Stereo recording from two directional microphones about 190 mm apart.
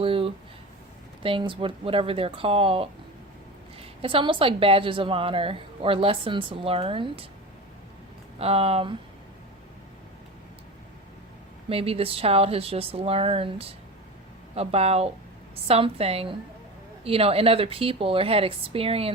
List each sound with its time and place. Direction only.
0.0 s a sound: 30° right (ahead or behind)
1.2 s a woman's voice: 25° right (ahead or behind)
8.4 s a woman's voice: 30° right (ahead or behind)
11.7 s a woman's voice: 30° right (ahead or behind)